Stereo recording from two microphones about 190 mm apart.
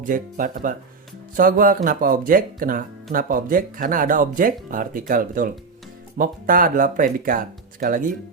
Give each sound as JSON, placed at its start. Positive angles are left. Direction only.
{"t": 0.0, "sound": "speech", "side_deg": -45}